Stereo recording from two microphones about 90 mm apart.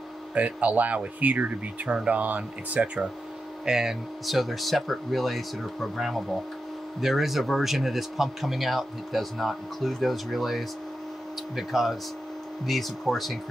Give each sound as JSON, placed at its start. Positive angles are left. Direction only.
{"t": 0.3, "sound": "speech", "side_deg": -15}